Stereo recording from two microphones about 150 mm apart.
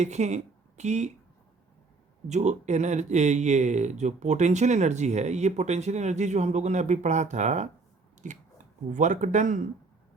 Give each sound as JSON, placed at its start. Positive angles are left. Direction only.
{"t": 0.0, "sound": "speech", "side_deg": -50}
{"t": 2.2, "sound": "speech", "side_deg": -50}